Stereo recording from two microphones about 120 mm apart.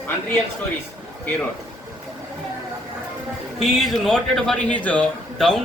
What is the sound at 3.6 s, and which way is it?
A man's voice, centre (ahead or behind).